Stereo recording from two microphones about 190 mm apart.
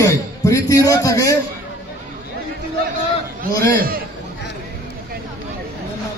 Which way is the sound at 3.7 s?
50° right (ahead or behind).